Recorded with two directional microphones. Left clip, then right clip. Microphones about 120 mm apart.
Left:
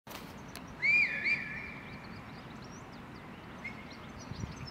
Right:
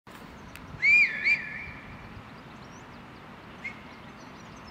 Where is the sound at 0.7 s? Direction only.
45° right (ahead or behind).